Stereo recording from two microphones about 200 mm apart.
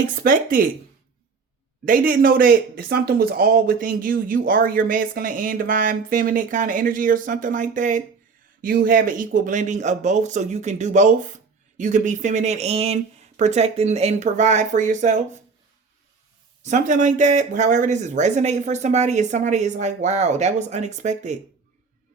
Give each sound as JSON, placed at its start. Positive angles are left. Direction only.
{"t": 0.2, "sound": "speech", "side_deg": -45}
{"t": 1.8, "sound": "speech", "side_deg": -45}
{"t": 16.6, "sound": "speech", "side_deg": -35}